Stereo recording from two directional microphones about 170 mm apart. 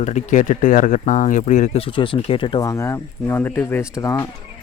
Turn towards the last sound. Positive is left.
turn(degrees=20)  # may be behind; listen again after turning